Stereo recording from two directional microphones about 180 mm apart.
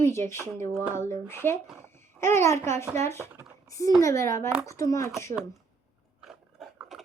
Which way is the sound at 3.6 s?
20° left (ahead or behind).